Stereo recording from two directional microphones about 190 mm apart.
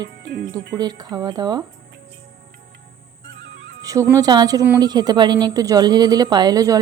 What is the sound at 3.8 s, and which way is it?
Speech, 15° right (ahead or behind).